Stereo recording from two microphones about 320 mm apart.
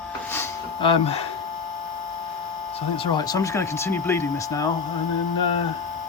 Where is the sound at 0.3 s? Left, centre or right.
Centre.